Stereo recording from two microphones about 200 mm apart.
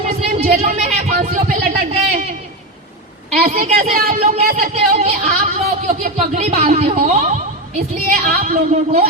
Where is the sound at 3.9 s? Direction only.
40° right (ahead or behind).